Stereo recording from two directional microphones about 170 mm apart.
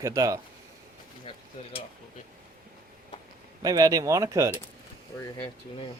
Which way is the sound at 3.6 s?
20° right (ahead or behind).